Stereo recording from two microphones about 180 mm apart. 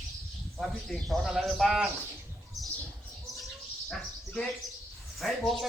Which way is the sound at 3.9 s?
5° left (ahead or behind).